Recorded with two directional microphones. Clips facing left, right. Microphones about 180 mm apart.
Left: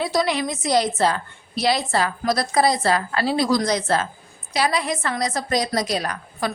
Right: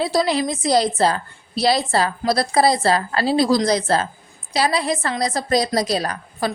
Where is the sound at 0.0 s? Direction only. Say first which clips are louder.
Right 3 dB; 30° right (ahead or behind).